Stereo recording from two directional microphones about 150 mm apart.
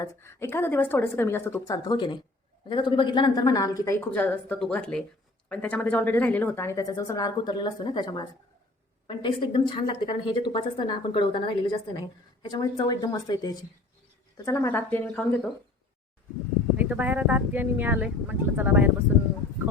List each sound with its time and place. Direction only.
0.0 s a woman's voice: 20° left (ahead or behind)
16.7 s speech: 10° right (ahead or behind)